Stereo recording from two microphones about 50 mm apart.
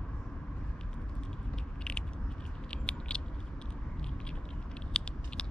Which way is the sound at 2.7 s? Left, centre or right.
Centre.